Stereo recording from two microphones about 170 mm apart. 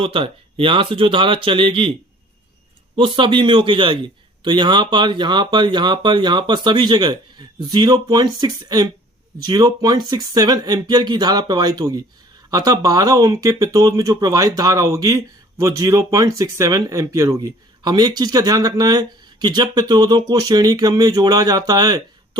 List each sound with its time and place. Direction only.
0.0 s speech: 30° right (ahead or behind)
2.9 s speech: 30° right (ahead or behind)